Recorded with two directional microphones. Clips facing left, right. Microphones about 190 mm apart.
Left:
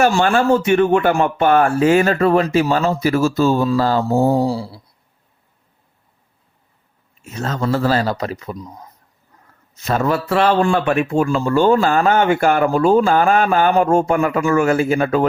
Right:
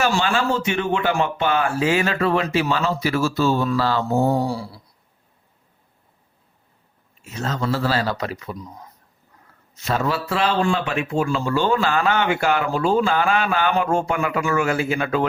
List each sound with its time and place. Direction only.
0.0 s a man's voice: 50° left (ahead or behind)
4.1 s speech: 25° left (ahead or behind)
7.3 s a man's voice: 50° left (ahead or behind)
9.8 s a man's voice: 50° left (ahead or behind)